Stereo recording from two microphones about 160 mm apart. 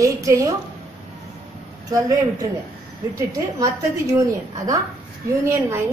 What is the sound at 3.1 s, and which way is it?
A woman's voice, 20° right (ahead or behind).